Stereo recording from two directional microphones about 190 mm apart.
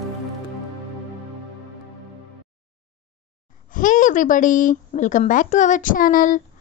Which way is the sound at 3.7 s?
45° left (ahead or behind).